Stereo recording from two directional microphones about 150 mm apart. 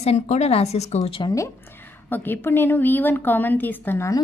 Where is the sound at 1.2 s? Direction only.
20° left (ahead or behind).